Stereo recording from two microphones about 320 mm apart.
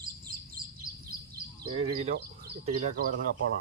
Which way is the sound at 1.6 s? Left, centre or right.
Centre.